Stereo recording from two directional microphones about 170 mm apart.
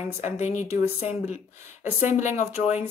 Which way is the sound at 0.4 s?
40° left (ahead or behind).